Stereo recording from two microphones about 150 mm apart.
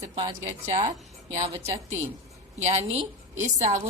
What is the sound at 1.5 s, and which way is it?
Speech, 20° right (ahead or behind).